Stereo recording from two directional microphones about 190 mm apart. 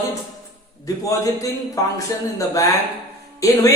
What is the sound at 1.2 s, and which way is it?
Speech, 15° left (ahead or behind).